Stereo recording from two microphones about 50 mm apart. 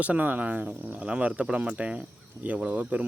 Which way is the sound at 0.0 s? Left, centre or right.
Right.